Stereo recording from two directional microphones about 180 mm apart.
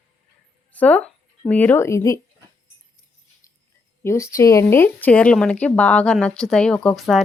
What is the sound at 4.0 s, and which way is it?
A woman's voice, 15° left (ahead or behind).